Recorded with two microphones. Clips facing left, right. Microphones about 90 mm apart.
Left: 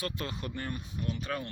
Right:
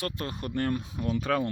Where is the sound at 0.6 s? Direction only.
70° right (ahead or behind).